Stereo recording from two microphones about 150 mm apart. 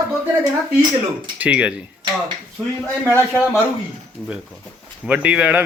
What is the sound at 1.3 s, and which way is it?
Speech, 10° right (ahead or behind).